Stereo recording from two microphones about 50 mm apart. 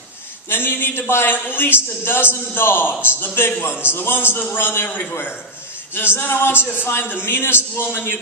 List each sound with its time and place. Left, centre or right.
0.5 s a man's voice: left